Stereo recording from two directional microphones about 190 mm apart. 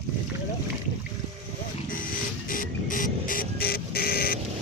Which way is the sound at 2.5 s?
45° left (ahead or behind).